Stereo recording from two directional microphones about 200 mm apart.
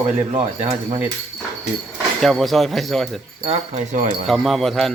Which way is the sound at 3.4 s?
35° right (ahead or behind).